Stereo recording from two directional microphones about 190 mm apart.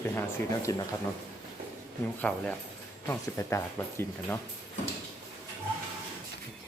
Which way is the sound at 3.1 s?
15° left (ahead or behind).